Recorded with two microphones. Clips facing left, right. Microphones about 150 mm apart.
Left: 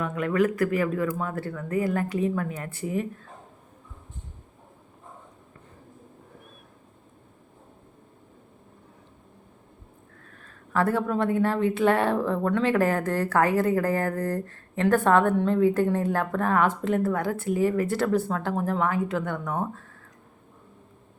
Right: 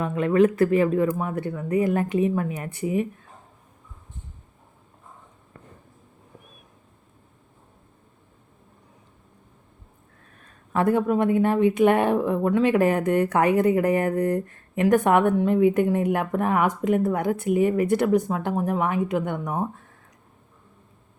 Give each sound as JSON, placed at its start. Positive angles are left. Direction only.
{"t": 0.0, "sound": "speech", "side_deg": -25}
{"t": 10.4, "sound": "speech", "side_deg": -20}